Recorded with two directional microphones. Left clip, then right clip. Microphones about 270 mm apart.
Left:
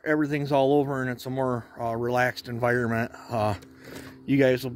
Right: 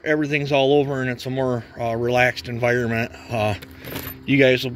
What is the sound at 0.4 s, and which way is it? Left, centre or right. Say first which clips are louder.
Speech: right 5 dB; left.